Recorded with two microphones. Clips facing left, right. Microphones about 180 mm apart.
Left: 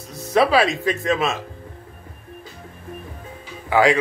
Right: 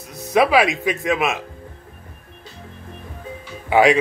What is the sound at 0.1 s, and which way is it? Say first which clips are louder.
Speech: right 1 dB; 15° right (ahead or behind).